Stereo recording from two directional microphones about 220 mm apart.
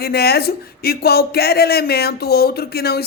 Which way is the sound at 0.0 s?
45° left (ahead or behind).